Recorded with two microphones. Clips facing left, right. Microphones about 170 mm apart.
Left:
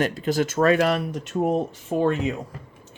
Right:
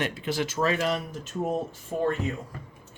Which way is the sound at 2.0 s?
85° left.